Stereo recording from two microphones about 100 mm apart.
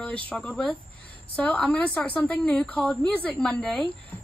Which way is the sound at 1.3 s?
10° left (ahead or behind).